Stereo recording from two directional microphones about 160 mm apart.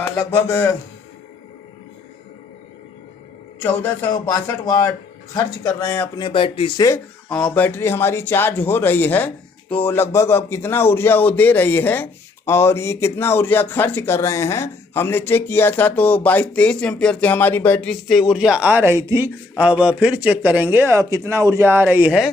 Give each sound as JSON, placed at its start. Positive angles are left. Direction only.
{"t": 0.3, "sound": "speech", "side_deg": 15}
{"t": 3.6, "sound": "speech", "side_deg": 15}
{"t": 5.8, "sound": "speech", "side_deg": 15}
{"t": 6.2, "sound": "speech", "side_deg": 35}
{"t": 7.3, "sound": "speech", "side_deg": 5}